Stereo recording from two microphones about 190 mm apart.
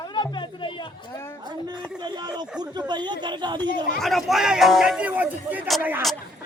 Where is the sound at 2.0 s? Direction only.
20° right (ahead or behind).